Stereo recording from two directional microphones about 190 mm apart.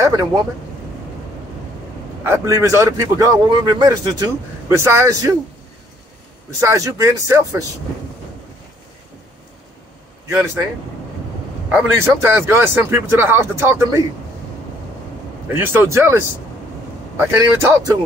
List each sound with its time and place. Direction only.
0.0 s speech: 15° right (ahead or behind)
2.2 s a man's voice: 15° right (ahead or behind)
6.6 s a man's voice: 15° right (ahead or behind)
11.7 s a man's voice: 15° right (ahead or behind)
15.4 s a man's voice: 10° right (ahead or behind)